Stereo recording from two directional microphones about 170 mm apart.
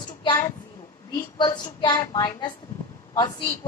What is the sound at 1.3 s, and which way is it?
A woman's voice, 25° left (ahead or behind).